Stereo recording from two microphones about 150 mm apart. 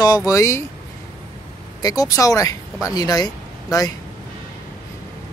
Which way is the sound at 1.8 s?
25° left (ahead or behind).